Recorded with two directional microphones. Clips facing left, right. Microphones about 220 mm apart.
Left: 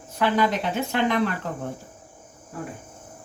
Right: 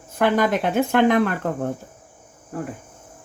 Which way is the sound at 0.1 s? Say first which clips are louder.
Right 3 dB; 50° right (ahead or behind).